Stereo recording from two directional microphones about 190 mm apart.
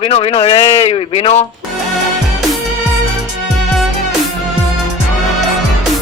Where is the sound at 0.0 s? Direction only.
30° left (ahead or behind).